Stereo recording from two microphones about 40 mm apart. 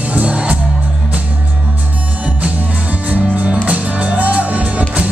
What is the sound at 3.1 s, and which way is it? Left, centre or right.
Music, right.